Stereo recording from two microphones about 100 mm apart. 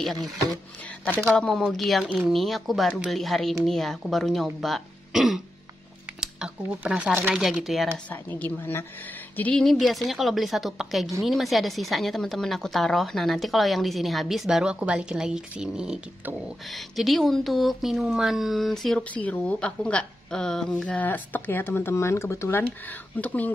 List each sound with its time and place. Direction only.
0.0 s a woman's voice: centre (ahead or behind)
8.1 s a woman's voice: 20° left (ahead or behind)
9.4 s a woman's voice: 10° left (ahead or behind)
19.1 s a woman's voice: 15° left (ahead or behind)
22.6 s a woman's voice: 15° left (ahead or behind)